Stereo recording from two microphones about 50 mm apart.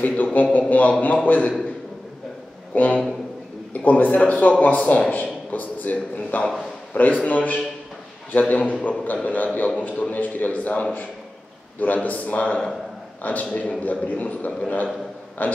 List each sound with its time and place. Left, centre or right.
0.0 s a man's voice: left
2.7 s a man's voice: left